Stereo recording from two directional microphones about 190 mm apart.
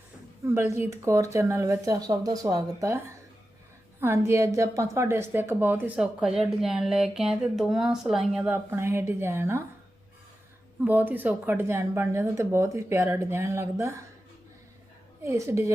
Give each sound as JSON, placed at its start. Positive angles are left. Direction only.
{"t": 0.4, "sound": "a woman's voice", "side_deg": -15}
{"t": 4.0, "sound": "a woman's voice", "side_deg": -15}
{"t": 10.8, "sound": "a woman's voice", "side_deg": -10}
{"t": 15.2, "sound": "a woman's voice", "side_deg": -15}